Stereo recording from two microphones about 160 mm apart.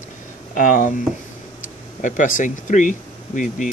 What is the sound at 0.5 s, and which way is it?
Speech, 55° left (ahead or behind).